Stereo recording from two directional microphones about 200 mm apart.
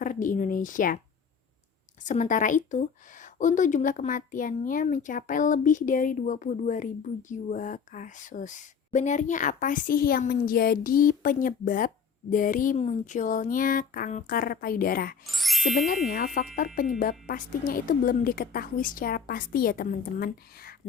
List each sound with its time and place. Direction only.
0.0 s speech: 40° left (ahead or behind)
2.0 s speech: 40° left (ahead or behind)
15.3 s music: centre (ahead or behind)
16.0 s speech: 45° left (ahead or behind)